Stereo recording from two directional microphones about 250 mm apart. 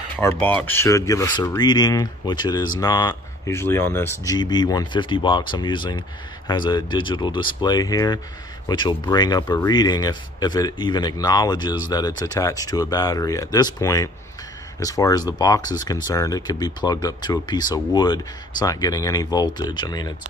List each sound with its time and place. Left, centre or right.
0.2 s speech: centre